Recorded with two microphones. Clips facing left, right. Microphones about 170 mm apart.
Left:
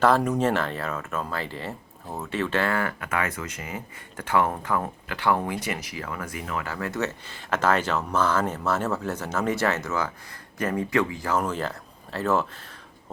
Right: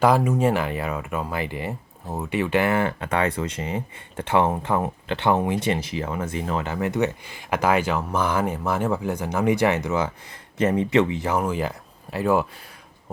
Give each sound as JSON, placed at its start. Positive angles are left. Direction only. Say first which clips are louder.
{"t": 0.0, "sound": "speech", "louder": "right 2 dB", "side_deg": -10}